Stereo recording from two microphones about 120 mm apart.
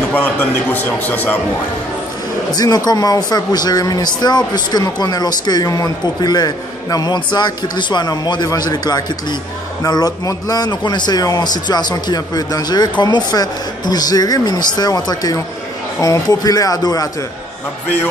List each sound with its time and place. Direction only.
0.1 s a man's voice: 15° left (ahead or behind)
2.5 s a man's voice: 35° left (ahead or behind)